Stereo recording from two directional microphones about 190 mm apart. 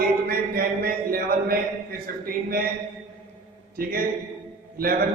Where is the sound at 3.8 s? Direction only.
50° right (ahead or behind).